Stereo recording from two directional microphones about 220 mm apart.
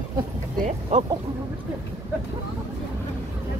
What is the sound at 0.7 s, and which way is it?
Speech, 30° right (ahead or behind).